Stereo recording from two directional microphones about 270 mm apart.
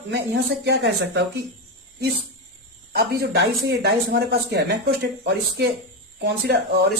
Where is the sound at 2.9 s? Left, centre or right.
Right.